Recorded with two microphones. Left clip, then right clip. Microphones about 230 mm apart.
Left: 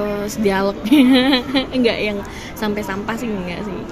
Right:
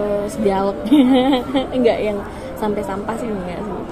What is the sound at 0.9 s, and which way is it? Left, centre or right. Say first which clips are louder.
A woman's voice: left 1 dB; left.